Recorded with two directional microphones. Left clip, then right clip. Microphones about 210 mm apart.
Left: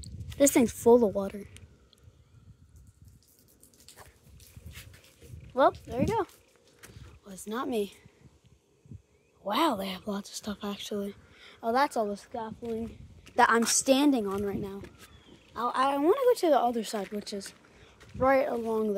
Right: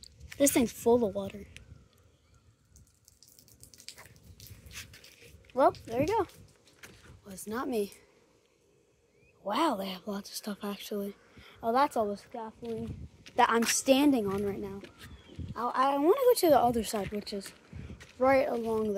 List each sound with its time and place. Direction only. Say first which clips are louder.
0.4 s speech: left 3 dB; 10° left (ahead or behind)
5.5 s speech: left 1 dB; 10° left (ahead or behind)
5.9 s speech: right 1 dB; centre (ahead or behind)
6.8 s a sound: right 1 dB; 5° left (ahead or behind)
9.4 s a woman's voice: left 2 dB; 10° left (ahead or behind)
12.4 s speech: left 3 dB; 15° left (ahead or behind)